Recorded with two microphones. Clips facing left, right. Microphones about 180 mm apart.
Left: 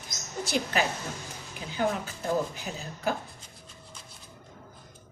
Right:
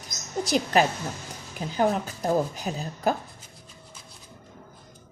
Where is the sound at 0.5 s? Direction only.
40° right (ahead or behind).